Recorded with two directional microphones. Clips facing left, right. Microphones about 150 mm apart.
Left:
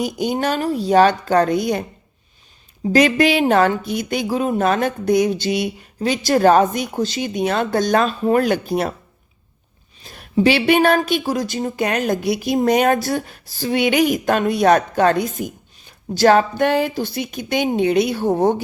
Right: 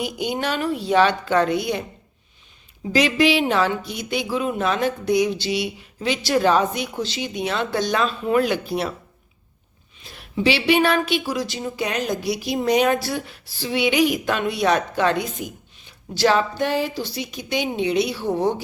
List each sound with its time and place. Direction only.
0.0 s a woman's voice: 40° left (ahead or behind)
2.9 s speech: 50° left (ahead or behind)
10.0 s speech: 40° left (ahead or behind)